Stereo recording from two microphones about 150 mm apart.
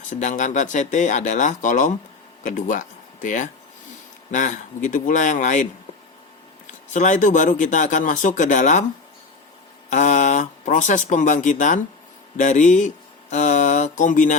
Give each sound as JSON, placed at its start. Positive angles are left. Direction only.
{"t": 0.1, "sound": "speech", "side_deg": 55}
{"t": 6.7, "sound": "speech", "side_deg": 55}
{"t": 9.9, "sound": "speech", "side_deg": 55}
{"t": 13.3, "sound": "mantra", "side_deg": 50}